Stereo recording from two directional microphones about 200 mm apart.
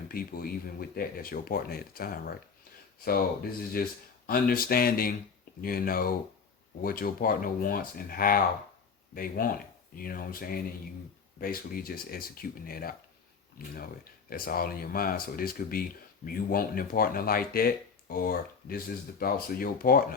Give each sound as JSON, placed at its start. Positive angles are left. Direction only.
{"t": 0.1, "sound": "speech", "side_deg": 45}
{"t": 3.8, "sound": "speech", "side_deg": 45}